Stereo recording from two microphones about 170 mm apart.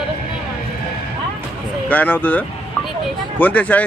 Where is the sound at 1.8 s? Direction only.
10° left (ahead or behind).